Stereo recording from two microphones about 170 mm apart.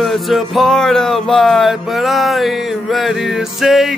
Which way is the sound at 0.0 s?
Centre (ahead or behind).